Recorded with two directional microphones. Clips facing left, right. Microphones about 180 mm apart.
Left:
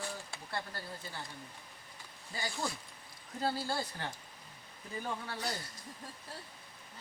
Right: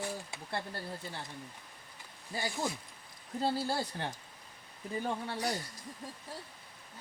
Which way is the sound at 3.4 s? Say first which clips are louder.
Right 2 dB; 25° right (ahead or behind).